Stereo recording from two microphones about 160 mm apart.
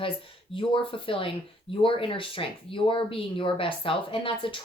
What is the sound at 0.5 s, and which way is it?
A woman's voice, 35° left (ahead or behind).